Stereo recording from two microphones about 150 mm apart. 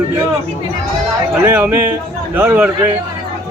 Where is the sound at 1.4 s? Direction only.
15° right (ahead or behind).